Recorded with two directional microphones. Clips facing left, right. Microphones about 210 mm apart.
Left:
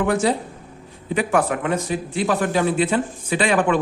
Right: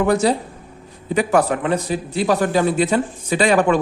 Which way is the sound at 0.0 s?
40° right (ahead or behind).